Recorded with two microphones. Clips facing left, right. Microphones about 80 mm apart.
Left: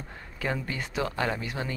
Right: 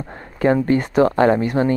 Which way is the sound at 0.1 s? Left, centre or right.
Right.